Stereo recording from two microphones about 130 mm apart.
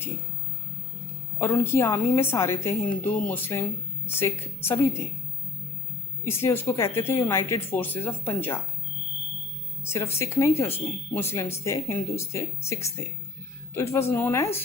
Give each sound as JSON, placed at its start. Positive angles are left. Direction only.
{"t": 1.4, "sound": "speech", "side_deg": 20}
{"t": 6.2, "sound": "speech", "side_deg": 15}
{"t": 9.8, "sound": "speech", "side_deg": 20}